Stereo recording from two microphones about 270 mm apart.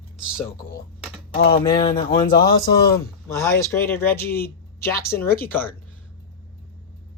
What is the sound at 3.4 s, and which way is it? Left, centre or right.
Speech, centre.